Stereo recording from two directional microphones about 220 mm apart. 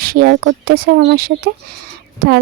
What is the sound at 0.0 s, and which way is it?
Speech, 45° right (ahead or behind).